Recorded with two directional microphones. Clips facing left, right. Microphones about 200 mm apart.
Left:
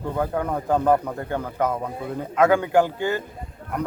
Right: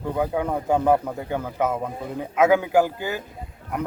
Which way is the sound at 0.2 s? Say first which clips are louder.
Right 1 dB; 10° right (ahead or behind).